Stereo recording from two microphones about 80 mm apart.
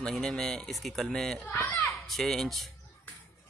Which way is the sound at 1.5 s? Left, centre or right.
Left.